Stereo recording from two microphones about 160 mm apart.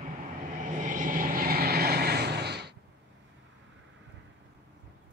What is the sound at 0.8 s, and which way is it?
Vehicle, 55° right (ahead or behind).